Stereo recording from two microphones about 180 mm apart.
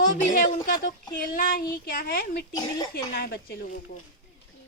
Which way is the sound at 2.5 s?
20° left (ahead or behind).